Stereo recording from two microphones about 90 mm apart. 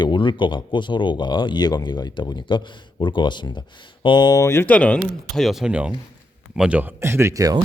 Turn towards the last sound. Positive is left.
turn(degrees=-40)  # may be behind; listen again after turning